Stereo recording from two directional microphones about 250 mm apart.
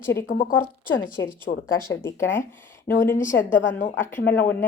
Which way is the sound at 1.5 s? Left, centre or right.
Left.